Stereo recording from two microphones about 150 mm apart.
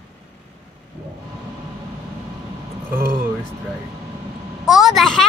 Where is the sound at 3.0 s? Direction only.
75° right (ahead or behind).